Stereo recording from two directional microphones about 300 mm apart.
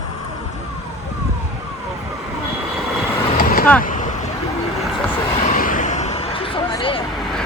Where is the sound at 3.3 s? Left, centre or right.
Left.